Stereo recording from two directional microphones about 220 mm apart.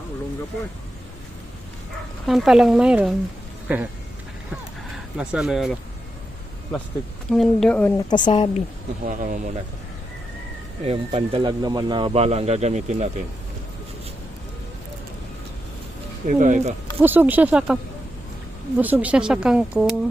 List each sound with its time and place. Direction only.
2.2 s speech: centre (ahead or behind)
5.1 s speech: 5° right (ahead or behind)
7.3 s speech: centre (ahead or behind)
7.9 s speech: 20° left (ahead or behind)
9.0 s speech: 35° right (ahead or behind)
10.8 s speech: 25° right (ahead or behind)
16.2 s speech: 35° right (ahead or behind)
17.0 s speech: 10° right (ahead or behind)
18.8 s speech: 5° right (ahead or behind)